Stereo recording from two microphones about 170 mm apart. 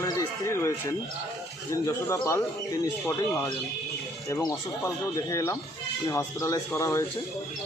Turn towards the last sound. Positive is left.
turn(degrees=20)  # may be behind; listen again after turning